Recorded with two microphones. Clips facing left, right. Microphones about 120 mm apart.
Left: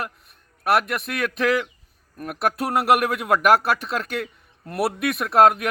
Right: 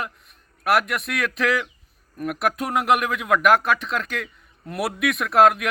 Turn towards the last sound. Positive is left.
turn(degrees=0)  # may be behind; listen again after turning